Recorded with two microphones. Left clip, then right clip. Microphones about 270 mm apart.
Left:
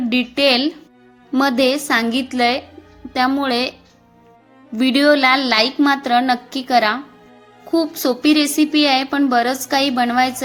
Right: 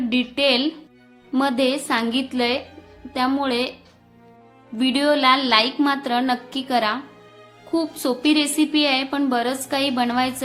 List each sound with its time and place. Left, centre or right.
0.1 s a woman's voice: centre
4.8 s a woman's voice: centre